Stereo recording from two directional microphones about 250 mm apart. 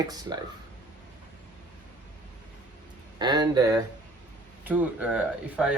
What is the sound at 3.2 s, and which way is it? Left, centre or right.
Speech, centre.